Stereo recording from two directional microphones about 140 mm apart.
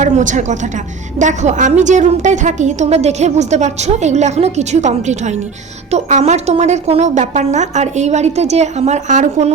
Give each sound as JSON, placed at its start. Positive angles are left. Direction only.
{"t": 0.0, "sound": "a woman's voice", "side_deg": -60}